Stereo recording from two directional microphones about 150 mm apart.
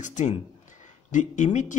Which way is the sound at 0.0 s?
55° left (ahead or behind).